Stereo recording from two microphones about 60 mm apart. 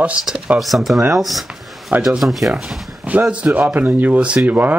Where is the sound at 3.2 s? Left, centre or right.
Right.